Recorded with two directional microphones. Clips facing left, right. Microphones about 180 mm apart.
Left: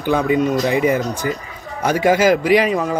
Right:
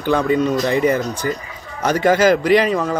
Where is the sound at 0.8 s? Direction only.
Centre (ahead or behind).